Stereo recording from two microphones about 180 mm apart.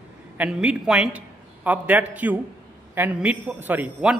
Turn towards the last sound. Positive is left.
turn(degrees=-5)  # may be behind; listen again after turning